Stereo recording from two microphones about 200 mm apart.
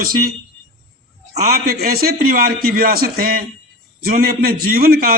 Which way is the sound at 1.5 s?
50° right (ahead or behind).